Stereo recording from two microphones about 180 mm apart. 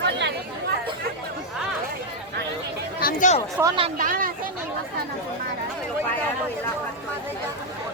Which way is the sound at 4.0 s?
50° right (ahead or behind).